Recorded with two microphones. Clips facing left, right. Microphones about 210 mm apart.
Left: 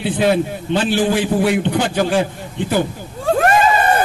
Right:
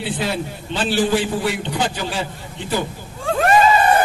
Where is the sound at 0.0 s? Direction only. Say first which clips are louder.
Left 7 dB; 55° left (ahead or behind).